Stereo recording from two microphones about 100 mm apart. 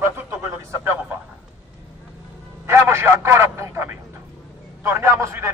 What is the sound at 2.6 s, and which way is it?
A man's voice, 25° right (ahead or behind).